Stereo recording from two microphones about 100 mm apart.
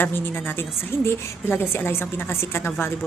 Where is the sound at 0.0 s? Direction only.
20° left (ahead or behind).